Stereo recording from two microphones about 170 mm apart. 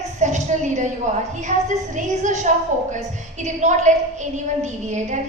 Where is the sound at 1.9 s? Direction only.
45° right (ahead or behind).